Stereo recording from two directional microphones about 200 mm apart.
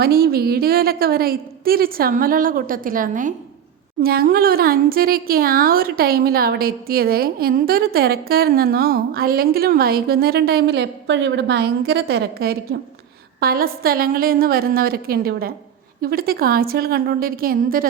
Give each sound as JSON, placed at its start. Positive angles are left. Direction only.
{"t": 0.0, "sound": "speech", "side_deg": -50}